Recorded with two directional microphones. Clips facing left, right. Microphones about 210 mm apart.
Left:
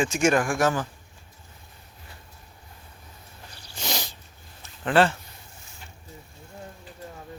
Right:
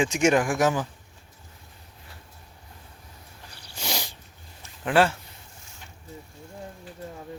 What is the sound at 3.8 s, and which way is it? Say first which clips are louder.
Sneeze: left 1 dB; 10° right (ahead or behind).